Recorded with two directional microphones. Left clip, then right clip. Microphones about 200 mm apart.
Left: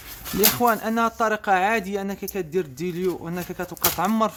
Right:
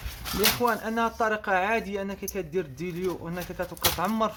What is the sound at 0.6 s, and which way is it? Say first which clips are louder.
Speech: left 5 dB; 45° left (ahead or behind).